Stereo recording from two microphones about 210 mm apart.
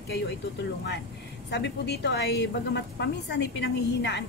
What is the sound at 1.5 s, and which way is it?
A woman's voice, 55° left (ahead or behind).